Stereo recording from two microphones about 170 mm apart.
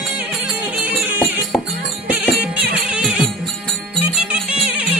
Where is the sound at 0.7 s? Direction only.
10° right (ahead or behind).